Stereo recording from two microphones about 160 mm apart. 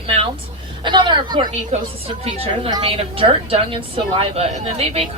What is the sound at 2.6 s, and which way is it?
A woman's voice, 35° right (ahead or behind).